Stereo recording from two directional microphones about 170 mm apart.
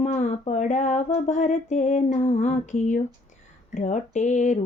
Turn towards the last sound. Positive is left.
turn(degrees=45)  # may be behind; listen again after turning